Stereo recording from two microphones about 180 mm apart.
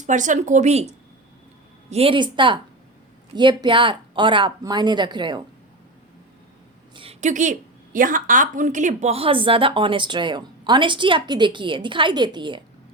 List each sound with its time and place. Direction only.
0.0 s speech: 45° right (ahead or behind)
1.9 s a woman's voice: 30° right (ahead or behind)
6.9 s a woman's voice: 30° right (ahead or behind)